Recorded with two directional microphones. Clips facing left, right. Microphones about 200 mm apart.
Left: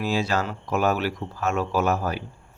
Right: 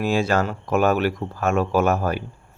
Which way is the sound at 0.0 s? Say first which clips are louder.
Right 4 dB; 50° right (ahead or behind).